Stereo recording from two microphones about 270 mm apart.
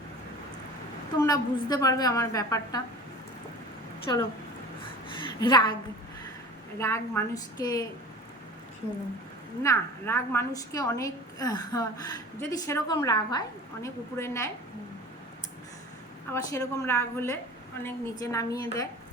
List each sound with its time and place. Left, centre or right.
1.2 s a woman's voice: centre
4.1 s a woman's voice: centre
5.4 s a woman's voice: centre
6.7 s a woman's voice: centre
9.6 s a woman's voice: centre
16.3 s a woman's voice: centre